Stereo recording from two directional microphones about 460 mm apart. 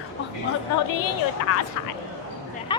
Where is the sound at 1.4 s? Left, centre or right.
Left.